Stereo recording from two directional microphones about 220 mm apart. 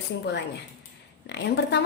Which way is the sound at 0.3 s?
50° left (ahead or behind).